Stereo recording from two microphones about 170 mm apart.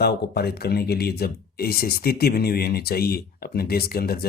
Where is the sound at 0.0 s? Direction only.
70° left (ahead or behind).